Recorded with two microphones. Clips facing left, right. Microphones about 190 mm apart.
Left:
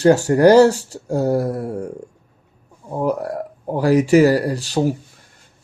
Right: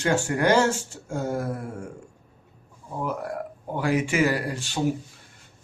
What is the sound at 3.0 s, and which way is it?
Speech, 40° left (ahead or behind).